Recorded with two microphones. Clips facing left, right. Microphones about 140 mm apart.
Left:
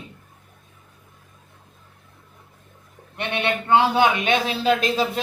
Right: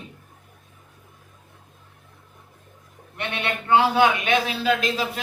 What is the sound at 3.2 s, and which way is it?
A man's voice, 20° left (ahead or behind).